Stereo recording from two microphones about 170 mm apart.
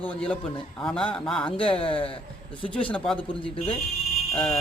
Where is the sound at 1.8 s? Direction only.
30° left (ahead or behind).